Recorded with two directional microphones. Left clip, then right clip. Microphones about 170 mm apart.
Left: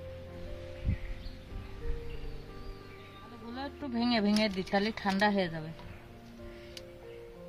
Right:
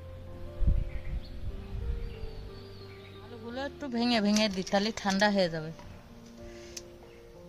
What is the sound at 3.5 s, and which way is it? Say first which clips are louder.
Speech: right 3 dB; 30° right (ahead or behind).